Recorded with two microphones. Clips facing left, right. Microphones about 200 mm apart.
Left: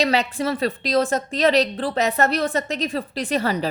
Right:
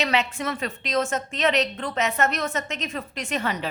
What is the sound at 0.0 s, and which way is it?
A woman's voice, 35° left (ahead or behind).